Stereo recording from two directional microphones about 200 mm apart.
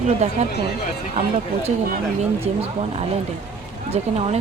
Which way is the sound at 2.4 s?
30° right (ahead or behind).